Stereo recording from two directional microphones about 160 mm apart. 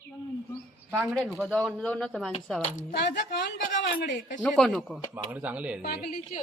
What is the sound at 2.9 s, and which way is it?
Speech, 90° left.